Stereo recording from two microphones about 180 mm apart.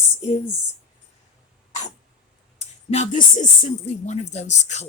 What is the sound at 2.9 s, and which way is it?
Speech, 40° left (ahead or behind).